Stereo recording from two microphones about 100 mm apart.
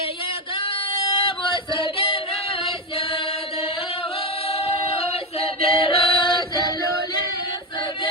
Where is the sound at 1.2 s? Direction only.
55° left (ahead or behind).